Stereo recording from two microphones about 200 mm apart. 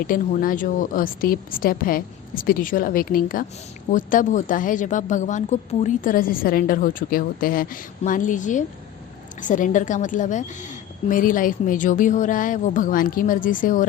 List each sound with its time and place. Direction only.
0.0 s a woman's voice: 45° left (ahead or behind)